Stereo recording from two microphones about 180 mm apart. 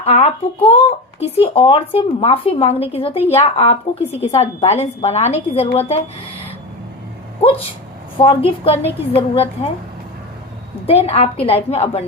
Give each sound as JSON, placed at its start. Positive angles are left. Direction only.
{"t": 0.0, "sound": "speech", "side_deg": 35}
{"t": 8.4, "sound": "speech", "side_deg": 35}
{"t": 10.8, "sound": "speech", "side_deg": 35}